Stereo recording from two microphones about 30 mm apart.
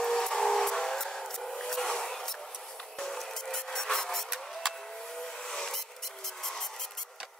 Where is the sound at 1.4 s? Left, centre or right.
Centre.